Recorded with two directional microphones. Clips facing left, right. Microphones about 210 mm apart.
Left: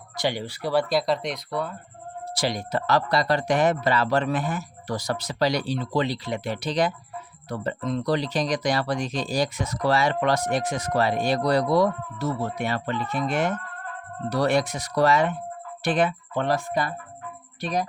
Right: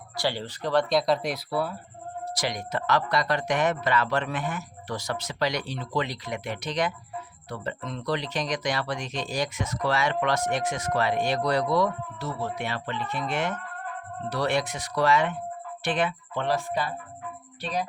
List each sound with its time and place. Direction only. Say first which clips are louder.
0.2 s speech: left 2 dB; 15° left (ahead or behind); by 1.8 s 5° right (ahead or behind)
2.3 s speech: left 4 dB; 30° left (ahead or behind); by 16.8 s 45° left (ahead or behind)